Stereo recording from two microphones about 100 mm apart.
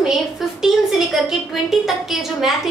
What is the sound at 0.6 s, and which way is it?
A woman's voice, 5° right (ahead or behind).